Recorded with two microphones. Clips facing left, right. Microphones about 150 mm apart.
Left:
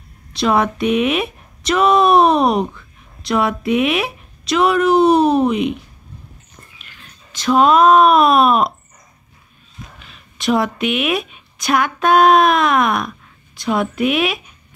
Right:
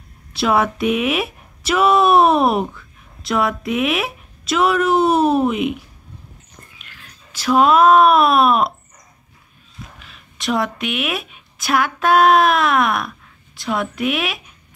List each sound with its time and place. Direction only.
0.3 s speech: 5° right (ahead or behind)
6.8 s speech: centre (ahead or behind)
9.9 s a woman's voice: centre (ahead or behind)